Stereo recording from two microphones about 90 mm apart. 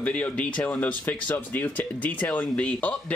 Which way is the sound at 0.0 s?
15° left (ahead or behind).